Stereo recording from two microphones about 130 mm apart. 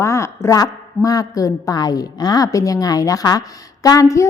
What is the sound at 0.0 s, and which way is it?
A woman's voice, 20° left (ahead or behind).